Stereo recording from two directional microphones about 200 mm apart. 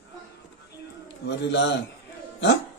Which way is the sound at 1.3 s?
60° left (ahead or behind).